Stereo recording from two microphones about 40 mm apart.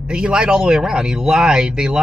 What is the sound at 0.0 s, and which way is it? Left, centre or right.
Speech, right.